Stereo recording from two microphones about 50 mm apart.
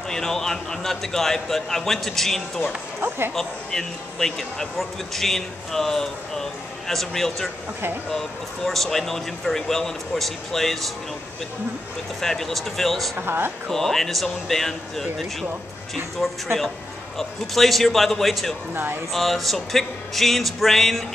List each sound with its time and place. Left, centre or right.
0.1 s speech: centre
12.2 s speech: centre
13.2 s speech: right
13.7 s speech: centre